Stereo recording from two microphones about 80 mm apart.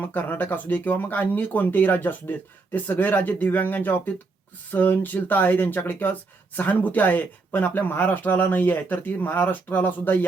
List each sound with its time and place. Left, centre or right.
0.0 s speech: left